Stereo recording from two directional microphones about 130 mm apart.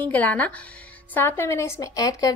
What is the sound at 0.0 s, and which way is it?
A woman's voice, 10° left (ahead or behind).